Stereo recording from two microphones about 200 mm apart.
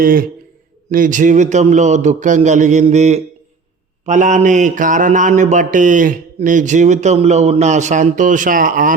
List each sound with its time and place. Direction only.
0.0 s a man's voice: 45° right (ahead or behind)
0.9 s mantra: 40° right (ahead or behind)